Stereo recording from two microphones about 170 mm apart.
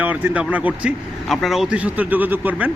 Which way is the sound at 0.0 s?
10° right (ahead or behind).